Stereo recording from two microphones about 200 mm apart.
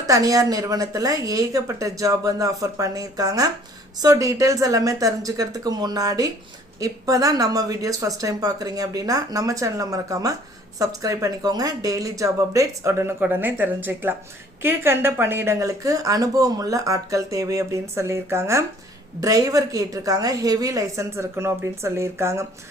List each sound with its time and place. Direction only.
0.0 s speech: 15° right (ahead or behind)